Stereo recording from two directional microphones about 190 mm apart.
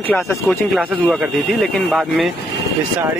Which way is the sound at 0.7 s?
5° right (ahead or behind).